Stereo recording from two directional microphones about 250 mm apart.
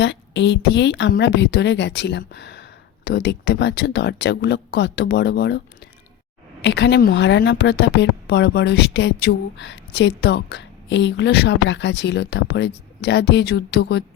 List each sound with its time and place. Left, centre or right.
0.0 s a woman's voice: left